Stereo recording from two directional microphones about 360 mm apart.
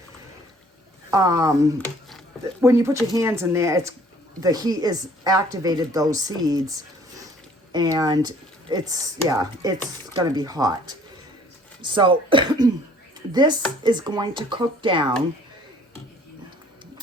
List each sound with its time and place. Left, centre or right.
1.1 s speech: centre
11.8 s speech: centre